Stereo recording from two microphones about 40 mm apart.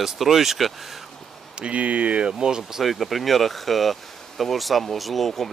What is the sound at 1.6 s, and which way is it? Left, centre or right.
Speech, right.